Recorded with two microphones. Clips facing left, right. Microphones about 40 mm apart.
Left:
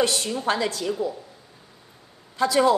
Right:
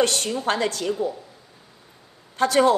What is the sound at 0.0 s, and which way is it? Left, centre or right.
Speech, right.